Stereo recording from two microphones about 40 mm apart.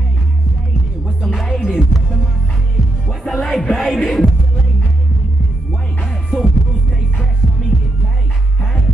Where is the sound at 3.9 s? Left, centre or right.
Centre.